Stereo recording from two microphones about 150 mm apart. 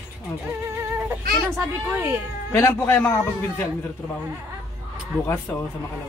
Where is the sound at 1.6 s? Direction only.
15° right (ahead or behind).